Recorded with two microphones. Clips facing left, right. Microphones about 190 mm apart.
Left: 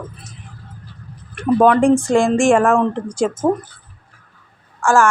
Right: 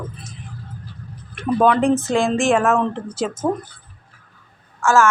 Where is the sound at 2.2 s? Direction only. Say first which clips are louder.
Left 4 dB; 50° left (ahead or behind).